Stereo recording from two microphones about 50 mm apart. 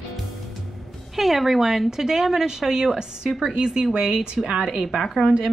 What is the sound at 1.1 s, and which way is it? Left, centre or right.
Speech, centre.